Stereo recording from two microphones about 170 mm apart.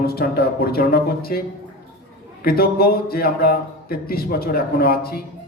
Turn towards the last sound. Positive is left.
turn(degrees=65)  # may be behind; listen again after turning